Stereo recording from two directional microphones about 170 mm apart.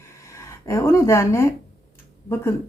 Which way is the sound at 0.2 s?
15° left (ahead or behind).